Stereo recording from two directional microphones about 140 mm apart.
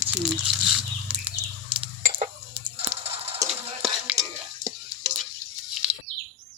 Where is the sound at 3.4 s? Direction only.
Centre (ahead or behind).